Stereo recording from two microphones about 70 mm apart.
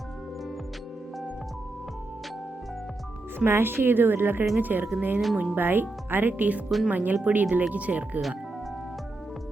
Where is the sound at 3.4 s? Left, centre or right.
Right.